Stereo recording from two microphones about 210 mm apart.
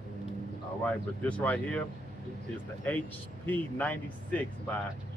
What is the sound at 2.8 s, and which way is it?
Speech, 10° left (ahead or behind).